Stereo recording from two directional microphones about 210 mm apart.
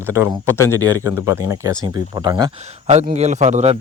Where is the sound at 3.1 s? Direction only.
35° right (ahead or behind).